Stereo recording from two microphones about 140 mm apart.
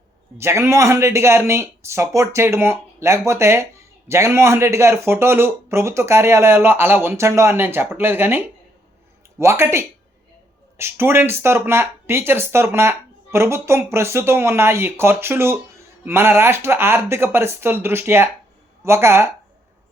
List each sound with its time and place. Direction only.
0.3 s speech: 20° right (ahead or behind)